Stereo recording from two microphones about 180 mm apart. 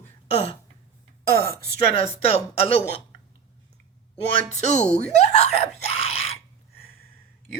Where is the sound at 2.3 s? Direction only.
35° left (ahead or behind).